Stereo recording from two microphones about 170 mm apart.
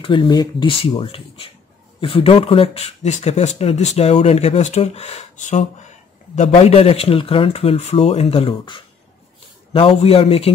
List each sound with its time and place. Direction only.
0.0 s speech: 30° left (ahead or behind)